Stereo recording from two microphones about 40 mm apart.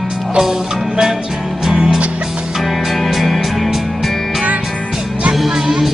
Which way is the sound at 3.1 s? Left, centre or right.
Centre.